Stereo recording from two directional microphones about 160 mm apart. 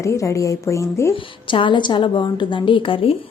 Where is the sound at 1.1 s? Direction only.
30° left (ahead or behind).